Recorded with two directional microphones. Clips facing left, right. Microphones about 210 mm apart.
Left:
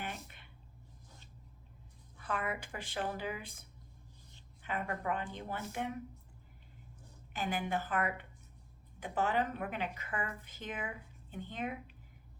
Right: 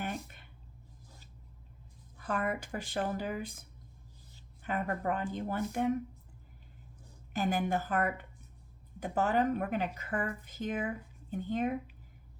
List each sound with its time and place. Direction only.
0.0 s a sound: 45° right (ahead or behind)
2.1 s speech: 45° right (ahead or behind)
4.6 s speech: 45° right (ahead or behind)
7.3 s speech: 40° right (ahead or behind)